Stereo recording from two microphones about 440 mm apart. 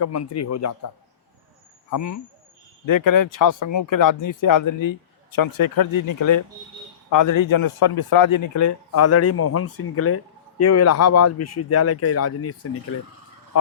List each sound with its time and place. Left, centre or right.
0.0 s speech: left
1.9 s speech: left